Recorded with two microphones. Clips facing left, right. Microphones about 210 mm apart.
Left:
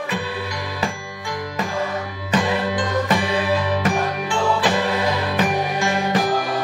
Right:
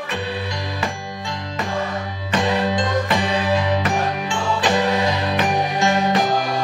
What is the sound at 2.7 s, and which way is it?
Music, 20° right (ahead or behind).